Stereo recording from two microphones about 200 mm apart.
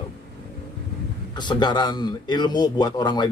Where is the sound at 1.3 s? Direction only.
20° left (ahead or behind).